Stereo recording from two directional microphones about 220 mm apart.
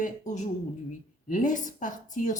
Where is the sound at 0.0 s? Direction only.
35° left (ahead or behind).